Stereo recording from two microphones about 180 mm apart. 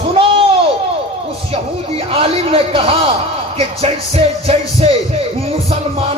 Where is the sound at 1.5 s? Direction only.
30° right (ahead or behind).